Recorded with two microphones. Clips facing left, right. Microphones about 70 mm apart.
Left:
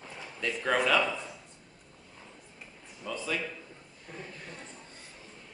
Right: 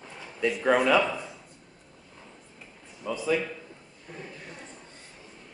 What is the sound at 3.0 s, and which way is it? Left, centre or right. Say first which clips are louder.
Speech: right 7 dB; centre.